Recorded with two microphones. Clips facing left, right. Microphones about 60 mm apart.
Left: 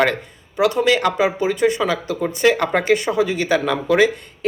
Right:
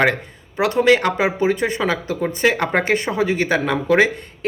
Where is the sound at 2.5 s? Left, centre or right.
Centre.